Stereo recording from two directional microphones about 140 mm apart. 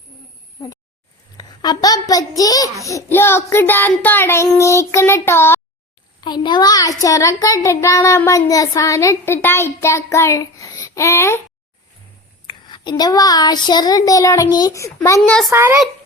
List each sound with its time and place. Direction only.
1.4 s a sound: 30° left (ahead or behind)
2.8 s child singing: 20° left (ahead or behind)
6.1 s a child's voice: 30° left (ahead or behind)
12.5 s child singing: 35° left (ahead or behind)
14.5 s a child's voice: 25° left (ahead or behind)
15.3 s speech: 5° left (ahead or behind)
15.5 s a child's voice: 15° right (ahead or behind)